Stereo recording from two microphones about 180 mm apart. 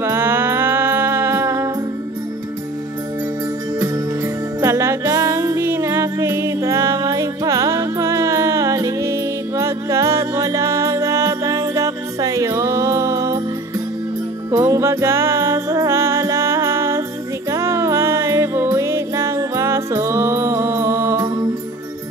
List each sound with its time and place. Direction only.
0.0 s music: 15° right (ahead or behind)
3.8 s music: 20° right (ahead or behind)
14.5 s music: 15° right (ahead or behind)